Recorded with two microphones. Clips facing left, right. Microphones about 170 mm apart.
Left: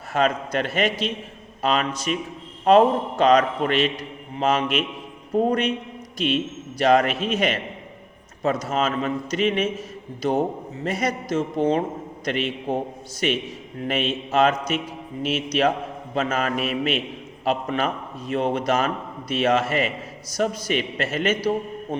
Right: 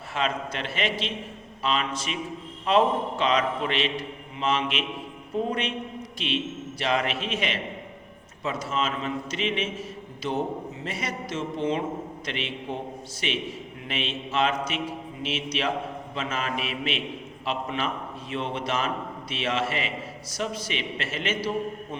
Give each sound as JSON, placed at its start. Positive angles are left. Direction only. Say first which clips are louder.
{"t": 0.1, "sound": "a man's voice", "louder": "left 7 dB", "side_deg": 45}